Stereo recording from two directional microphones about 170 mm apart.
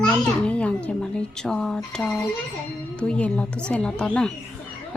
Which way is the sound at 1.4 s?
5° left (ahead or behind).